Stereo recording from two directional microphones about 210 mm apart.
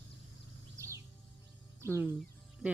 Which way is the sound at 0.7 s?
15° right (ahead or behind).